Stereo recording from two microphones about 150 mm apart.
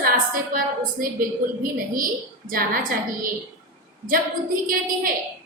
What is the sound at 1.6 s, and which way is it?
A woman's voice, 65° right (ahead or behind).